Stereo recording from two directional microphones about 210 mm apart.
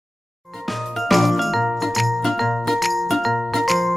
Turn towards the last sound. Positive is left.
turn(degrees=0)  # may be behind; listen again after turning